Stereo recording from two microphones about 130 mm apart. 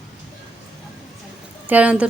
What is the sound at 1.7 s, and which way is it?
Speech, 10° right (ahead or behind).